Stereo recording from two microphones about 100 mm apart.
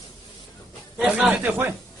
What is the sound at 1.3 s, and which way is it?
Speech, 20° right (ahead or behind).